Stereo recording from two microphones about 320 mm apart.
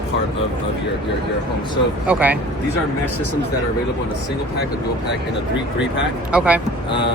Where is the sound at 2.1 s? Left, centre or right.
Centre.